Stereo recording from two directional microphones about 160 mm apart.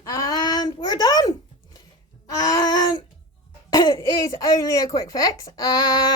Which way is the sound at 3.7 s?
20° left (ahead or behind).